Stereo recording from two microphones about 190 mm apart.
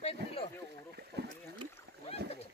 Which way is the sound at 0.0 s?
30° left (ahead or behind).